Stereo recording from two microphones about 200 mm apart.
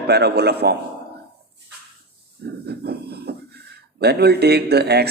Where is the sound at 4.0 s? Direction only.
55° right (ahead or behind).